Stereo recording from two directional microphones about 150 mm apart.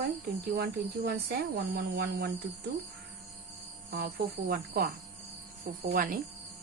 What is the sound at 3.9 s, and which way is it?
Speech, 90° right.